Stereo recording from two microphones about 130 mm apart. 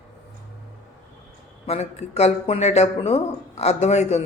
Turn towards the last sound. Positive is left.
turn(degrees=60)  # may be behind; listen again after turning